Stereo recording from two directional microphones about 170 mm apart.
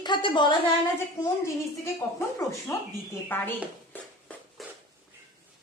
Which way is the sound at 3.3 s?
10° left (ahead or behind).